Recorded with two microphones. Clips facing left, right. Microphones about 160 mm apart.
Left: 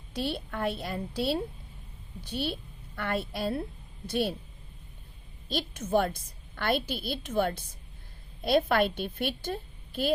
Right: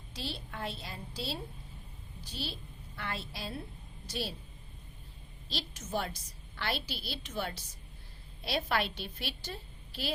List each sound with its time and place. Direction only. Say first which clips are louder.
0.1 s a woman's voice: left 9 dB; 60° left (ahead or behind)
5.5 s a woman's voice: left 10 dB; 55° left (ahead or behind)